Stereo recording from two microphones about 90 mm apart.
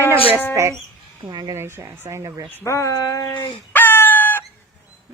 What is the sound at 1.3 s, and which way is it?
Speech, 55° right (ahead or behind).